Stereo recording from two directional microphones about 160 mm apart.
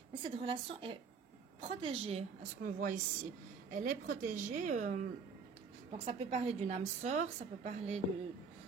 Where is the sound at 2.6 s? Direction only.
55° right (ahead or behind).